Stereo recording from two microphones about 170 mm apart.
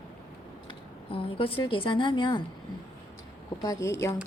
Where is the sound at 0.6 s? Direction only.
30° left (ahead or behind).